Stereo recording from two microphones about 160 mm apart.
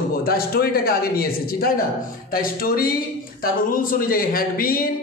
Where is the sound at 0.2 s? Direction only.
70° left (ahead or behind).